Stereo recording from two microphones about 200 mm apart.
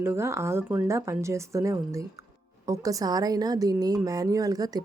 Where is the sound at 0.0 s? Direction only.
10° right (ahead or behind).